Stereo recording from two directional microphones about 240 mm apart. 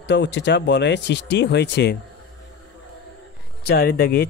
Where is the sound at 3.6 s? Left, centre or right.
Left.